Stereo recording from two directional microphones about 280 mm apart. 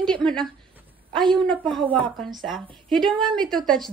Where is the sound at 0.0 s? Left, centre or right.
Centre.